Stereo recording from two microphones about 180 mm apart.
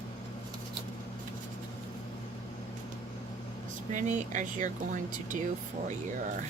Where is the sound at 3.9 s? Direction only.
45° right (ahead or behind).